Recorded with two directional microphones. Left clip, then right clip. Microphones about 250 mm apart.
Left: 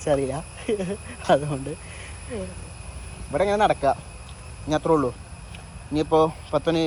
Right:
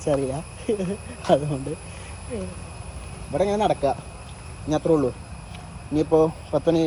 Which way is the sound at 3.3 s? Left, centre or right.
Centre.